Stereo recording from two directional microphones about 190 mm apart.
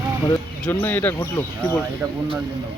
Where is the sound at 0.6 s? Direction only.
10° left (ahead or behind).